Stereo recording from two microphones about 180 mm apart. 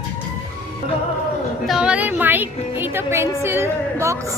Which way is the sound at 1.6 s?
5° right (ahead or behind).